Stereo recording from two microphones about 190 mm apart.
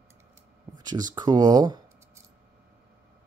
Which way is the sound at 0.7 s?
20° right (ahead or behind).